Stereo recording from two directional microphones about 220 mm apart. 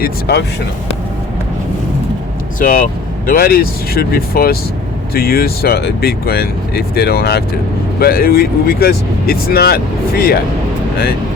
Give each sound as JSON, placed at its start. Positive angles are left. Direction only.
{"t": 0.0, "sound": "speech", "side_deg": 50}
{"t": 2.6, "sound": "speech", "side_deg": 40}